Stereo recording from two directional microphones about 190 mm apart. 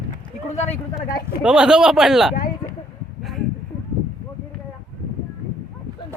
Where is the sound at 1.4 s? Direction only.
5° right (ahead or behind).